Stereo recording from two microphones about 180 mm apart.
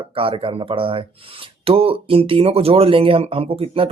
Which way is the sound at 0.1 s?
30° right (ahead or behind).